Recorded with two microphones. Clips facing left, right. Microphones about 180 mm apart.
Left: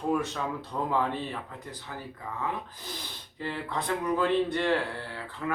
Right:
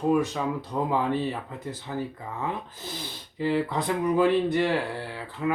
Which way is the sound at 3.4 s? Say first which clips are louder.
Right 8 dB; 15° right (ahead or behind).